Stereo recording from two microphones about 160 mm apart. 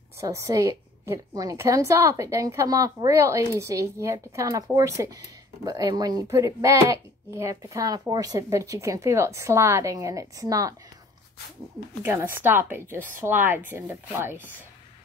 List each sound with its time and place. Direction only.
0.2 s a woman's voice: 20° right (ahead or behind)
12.0 s a woman's voice: 15° right (ahead or behind)